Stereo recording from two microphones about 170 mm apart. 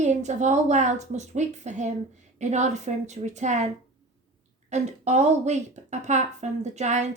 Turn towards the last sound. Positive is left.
turn(degrees=-45)  # may be behind; listen again after turning